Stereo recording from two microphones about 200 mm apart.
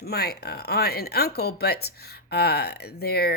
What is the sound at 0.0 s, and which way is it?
Speech, 50° left (ahead or behind).